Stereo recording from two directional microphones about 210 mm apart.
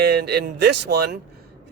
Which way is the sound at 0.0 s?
50° right (ahead or behind).